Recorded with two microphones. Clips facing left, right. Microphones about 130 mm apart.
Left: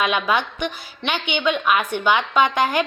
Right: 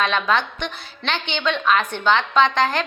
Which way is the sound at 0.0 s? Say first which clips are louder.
Even; 10° left (ahead or behind).